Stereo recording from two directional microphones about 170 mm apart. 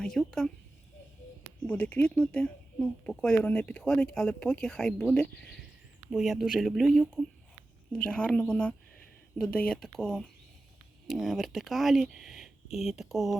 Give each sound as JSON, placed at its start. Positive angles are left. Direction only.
{"t": 0.0, "sound": "speech", "side_deg": 0}
{"t": 1.6, "sound": "speech", "side_deg": 10}